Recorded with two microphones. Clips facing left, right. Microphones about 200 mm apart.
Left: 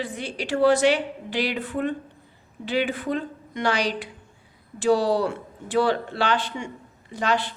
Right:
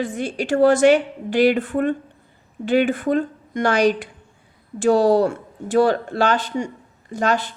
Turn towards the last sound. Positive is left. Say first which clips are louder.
# right 4 dB
turn(degrees=-45)  # may be behind; listen again after turning